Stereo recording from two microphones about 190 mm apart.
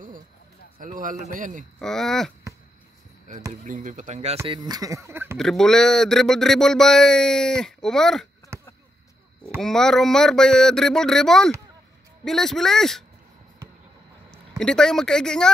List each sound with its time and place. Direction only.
0.7 s a man's voice: 45° right (ahead or behind)
1.8 s speech: centre (ahead or behind)
3.3 s speech: 45° right (ahead or behind)
4.5 s speech: 20° right (ahead or behind)
5.4 s speech: centre (ahead or behind)
9.6 s speech: 5° left (ahead or behind)
14.6 s speech: 5° left (ahead or behind)